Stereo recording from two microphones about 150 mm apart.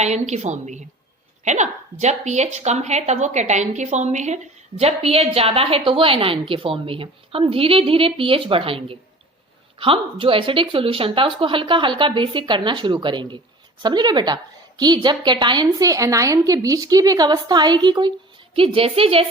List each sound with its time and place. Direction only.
0.0 s a woman's voice: 50° right (ahead or behind)